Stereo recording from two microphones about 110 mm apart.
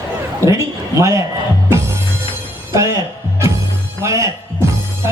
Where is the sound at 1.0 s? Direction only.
30° right (ahead or behind).